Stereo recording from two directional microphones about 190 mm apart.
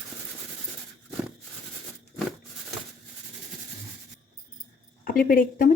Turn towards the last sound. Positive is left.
turn(degrees=50)  # may be behind; listen again after turning